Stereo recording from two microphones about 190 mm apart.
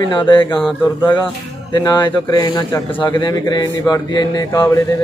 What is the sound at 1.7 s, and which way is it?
Speech, 20° left (ahead or behind).